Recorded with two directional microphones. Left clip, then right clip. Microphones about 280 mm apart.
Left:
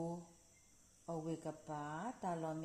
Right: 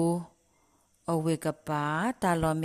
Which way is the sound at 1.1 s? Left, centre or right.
Right.